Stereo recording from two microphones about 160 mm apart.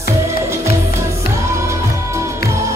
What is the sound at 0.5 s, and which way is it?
Music, 15° right (ahead or behind).